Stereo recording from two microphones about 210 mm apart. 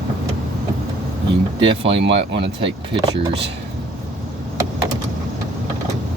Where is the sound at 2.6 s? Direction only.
25° right (ahead or behind).